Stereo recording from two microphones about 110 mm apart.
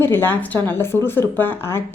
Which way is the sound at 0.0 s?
20° left (ahead or behind).